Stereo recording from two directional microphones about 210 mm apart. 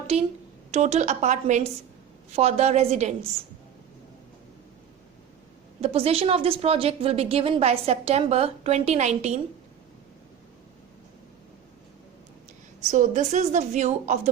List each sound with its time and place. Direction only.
0.1 s a woman's voice: 30° right (ahead or behind)
5.8 s a woman's voice: 30° right (ahead or behind)
12.9 s a woman's voice: 35° right (ahead or behind)